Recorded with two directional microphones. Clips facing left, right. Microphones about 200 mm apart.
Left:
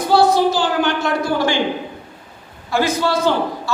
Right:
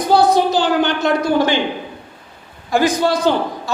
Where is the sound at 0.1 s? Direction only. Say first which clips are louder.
Right 1 dB; 15° right (ahead or behind).